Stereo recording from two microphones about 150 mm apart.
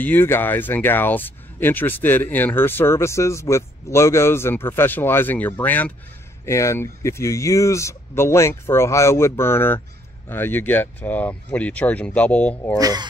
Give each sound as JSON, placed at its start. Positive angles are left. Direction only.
{"t": 0.0, "sound": "speech", "side_deg": 15}
{"t": 12.7, "sound": "speech", "side_deg": -25}